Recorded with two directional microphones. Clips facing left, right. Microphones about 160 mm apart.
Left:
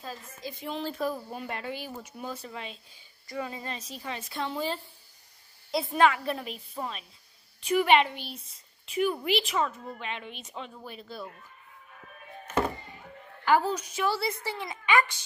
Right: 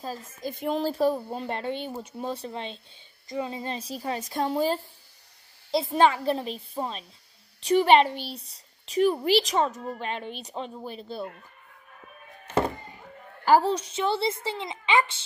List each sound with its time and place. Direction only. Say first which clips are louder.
0.4 s a woman's voice: right 8 dB; 50° right (ahead or behind)
5.7 s a woman's voice: right 2 dB; 25° right (ahead or behind)
12.4 s music: right 3 dB; 35° right (ahead or behind)
13.5 s a woman's voice: right 4 dB; 30° right (ahead or behind)